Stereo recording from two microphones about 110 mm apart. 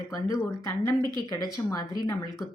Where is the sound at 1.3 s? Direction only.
35° left (ahead or behind).